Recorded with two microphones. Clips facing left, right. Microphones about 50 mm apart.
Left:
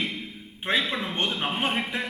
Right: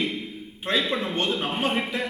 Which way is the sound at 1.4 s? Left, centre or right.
Left.